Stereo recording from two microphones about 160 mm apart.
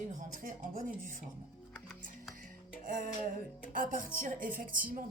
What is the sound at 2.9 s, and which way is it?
A woman's voice, 60° right (ahead or behind).